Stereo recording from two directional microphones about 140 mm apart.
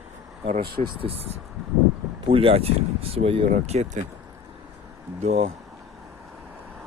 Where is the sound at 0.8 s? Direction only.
40° right (ahead or behind).